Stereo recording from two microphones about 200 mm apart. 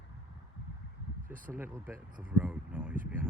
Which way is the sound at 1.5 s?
10° right (ahead or behind).